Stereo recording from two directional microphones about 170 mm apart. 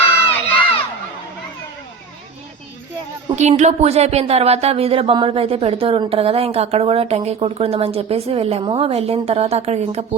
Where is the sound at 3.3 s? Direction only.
40° right (ahead or behind).